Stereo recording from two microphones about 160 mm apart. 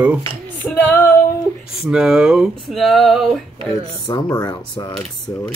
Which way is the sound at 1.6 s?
Centre (ahead or behind).